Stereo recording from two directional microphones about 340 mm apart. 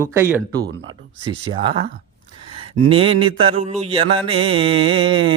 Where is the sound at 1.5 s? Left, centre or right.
Centre.